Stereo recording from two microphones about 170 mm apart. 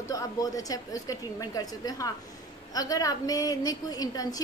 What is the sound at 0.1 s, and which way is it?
A woman's voice, 20° left (ahead or behind).